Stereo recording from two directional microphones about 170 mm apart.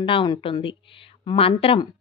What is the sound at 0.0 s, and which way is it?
A woman's voice, 30° left (ahead or behind).